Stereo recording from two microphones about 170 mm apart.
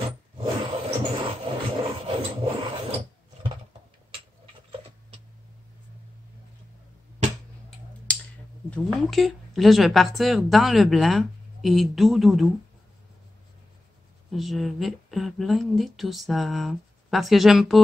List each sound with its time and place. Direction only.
0.4 s rub: 30° right (ahead or behind)
8.1 s a sound: 5° left (ahead or behind)
8.6 s speech: 5° left (ahead or behind)
14.3 s speech: centre (ahead or behind)